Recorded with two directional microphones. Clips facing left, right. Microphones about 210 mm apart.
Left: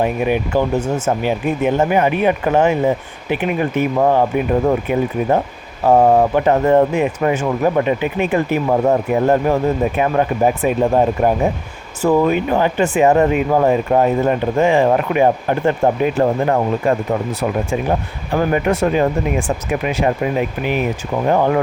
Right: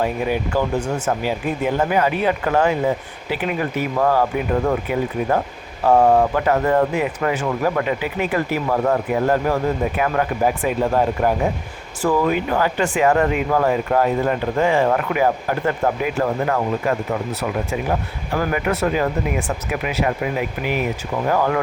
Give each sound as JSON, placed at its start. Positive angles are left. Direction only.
{"t": 0.0, "sound": "speech", "side_deg": 20}
{"t": 18.3, "sound": "speech", "side_deg": 30}